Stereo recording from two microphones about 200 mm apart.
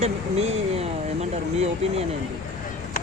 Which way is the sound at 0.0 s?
30° right (ahead or behind).